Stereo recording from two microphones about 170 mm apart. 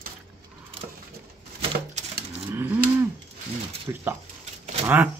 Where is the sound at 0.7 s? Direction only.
35° right (ahead or behind).